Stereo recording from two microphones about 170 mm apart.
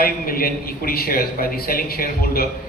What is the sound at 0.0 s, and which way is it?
A man's voice, 60° left (ahead or behind).